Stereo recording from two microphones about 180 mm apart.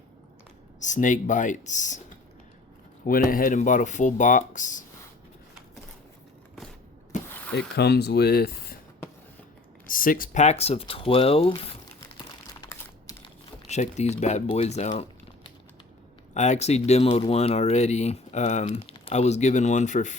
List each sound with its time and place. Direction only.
0.8 s speech: 45° left (ahead or behind)
3.1 s speech: 50° left (ahead or behind)
7.1 s mechanisms: 40° left (ahead or behind)
7.5 s speech: 65° left (ahead or behind)
9.8 s speech: 50° left (ahead or behind); by 11.7 s 30° left (ahead or behind)
13.2 s speech: 40° left (ahead or behind)
16.3 s speech: 40° left (ahead or behind)